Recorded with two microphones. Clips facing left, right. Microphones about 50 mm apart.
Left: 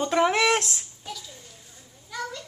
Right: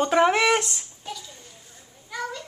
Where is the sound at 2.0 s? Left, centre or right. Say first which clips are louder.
Right 2 dB; centre.